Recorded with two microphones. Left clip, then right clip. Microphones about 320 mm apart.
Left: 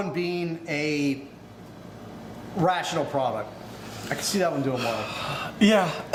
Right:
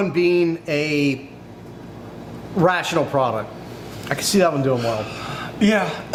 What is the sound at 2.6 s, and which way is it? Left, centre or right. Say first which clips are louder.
Speech: right 6 dB; right.